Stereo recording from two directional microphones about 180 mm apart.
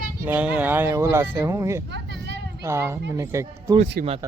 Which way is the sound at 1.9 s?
75° right (ahead or behind).